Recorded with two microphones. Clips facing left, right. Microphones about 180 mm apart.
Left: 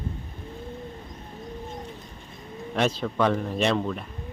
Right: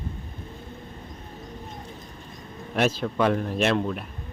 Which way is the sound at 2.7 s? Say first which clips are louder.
Right 1 dB; 5° right (ahead or behind).